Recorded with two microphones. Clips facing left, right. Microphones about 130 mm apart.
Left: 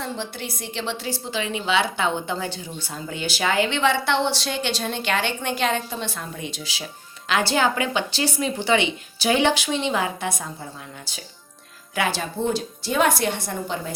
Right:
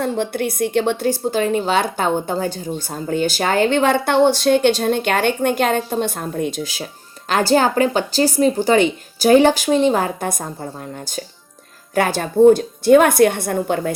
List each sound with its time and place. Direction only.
0.0 s a woman's voice: 55° right (ahead or behind)